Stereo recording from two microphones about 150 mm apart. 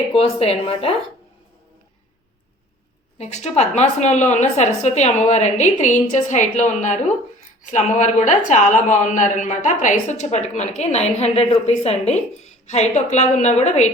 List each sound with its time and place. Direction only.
0.1 s speech: 40° left (ahead or behind)
3.2 s a woman's voice: 45° left (ahead or behind)